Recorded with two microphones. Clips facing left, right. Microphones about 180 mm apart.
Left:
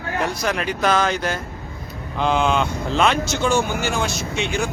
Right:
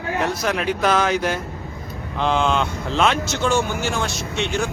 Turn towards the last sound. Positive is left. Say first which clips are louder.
# even
turn(degrees=0)  # may be behind; listen again after turning